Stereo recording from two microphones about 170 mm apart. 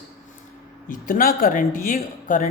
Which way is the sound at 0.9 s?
55° left (ahead or behind).